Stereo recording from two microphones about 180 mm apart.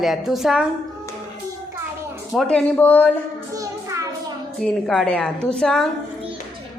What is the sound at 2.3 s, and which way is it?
Speech, 5° left (ahead or behind).